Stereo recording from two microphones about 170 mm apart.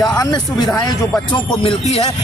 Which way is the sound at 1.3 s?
35° left (ahead or behind).